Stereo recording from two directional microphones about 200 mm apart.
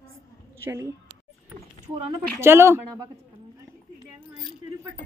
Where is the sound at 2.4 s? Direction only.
10° right (ahead or behind).